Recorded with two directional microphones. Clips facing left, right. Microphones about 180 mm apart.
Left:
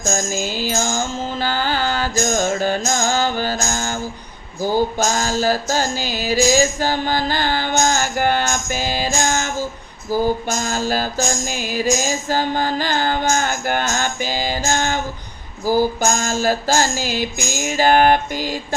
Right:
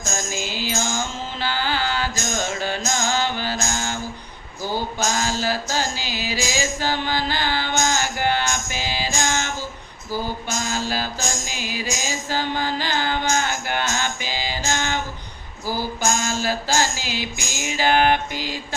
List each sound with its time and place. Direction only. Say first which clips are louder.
0.1 s music: left 5 dB; 45° left (ahead or behind)
10.1 s a sound: left 8 dB; 45° left (ahead or behind)
10.4 s music: left 4 dB; 45° left (ahead or behind)